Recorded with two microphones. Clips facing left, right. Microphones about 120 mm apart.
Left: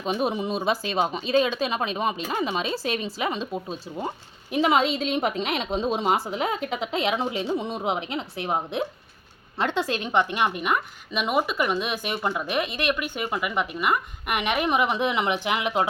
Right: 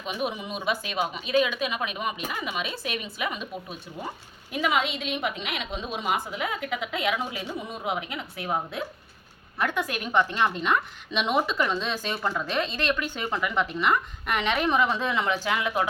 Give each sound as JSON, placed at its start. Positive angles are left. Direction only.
{"t": 0.0, "sound": "a woman's voice", "side_deg": 35}